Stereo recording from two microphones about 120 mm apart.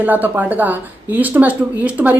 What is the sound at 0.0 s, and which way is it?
Speech, 15° right (ahead or behind).